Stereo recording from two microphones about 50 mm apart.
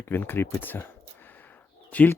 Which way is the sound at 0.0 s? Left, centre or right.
Left.